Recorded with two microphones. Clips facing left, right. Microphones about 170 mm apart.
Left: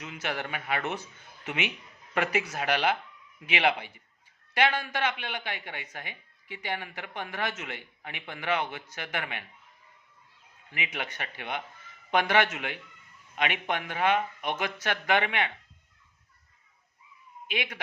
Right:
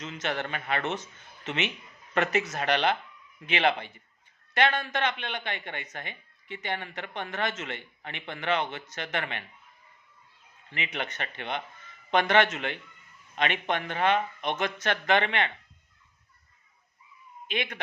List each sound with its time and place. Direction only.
0.0 s a man's voice: 10° left (ahead or behind)
10.7 s speech: 10° left (ahead or behind)
17.5 s speech: 10° left (ahead or behind)